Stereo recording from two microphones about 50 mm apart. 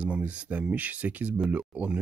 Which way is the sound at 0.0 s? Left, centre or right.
Right.